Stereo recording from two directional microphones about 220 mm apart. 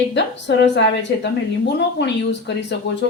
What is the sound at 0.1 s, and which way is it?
A woman's voice, 55° left (ahead or behind).